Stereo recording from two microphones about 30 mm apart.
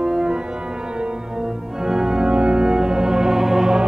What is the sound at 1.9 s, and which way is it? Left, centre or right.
Organ, right.